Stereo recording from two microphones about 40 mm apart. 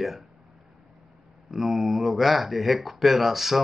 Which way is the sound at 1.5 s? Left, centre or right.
Centre.